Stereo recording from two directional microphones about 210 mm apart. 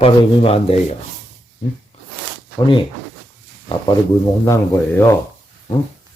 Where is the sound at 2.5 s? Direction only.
20° left (ahead or behind).